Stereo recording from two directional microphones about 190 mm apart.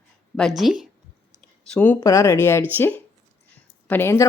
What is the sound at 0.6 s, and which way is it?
Speech, centre (ahead or behind).